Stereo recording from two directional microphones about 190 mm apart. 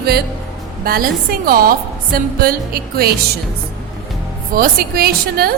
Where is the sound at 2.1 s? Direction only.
50° right (ahead or behind).